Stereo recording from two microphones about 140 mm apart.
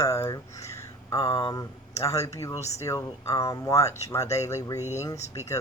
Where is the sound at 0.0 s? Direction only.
20° left (ahead or behind).